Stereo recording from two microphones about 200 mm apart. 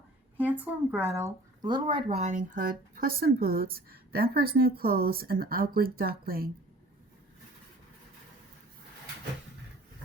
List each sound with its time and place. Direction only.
0.3 s speech: 10° right (ahead or behind); by 6.5 s 50° right (ahead or behind)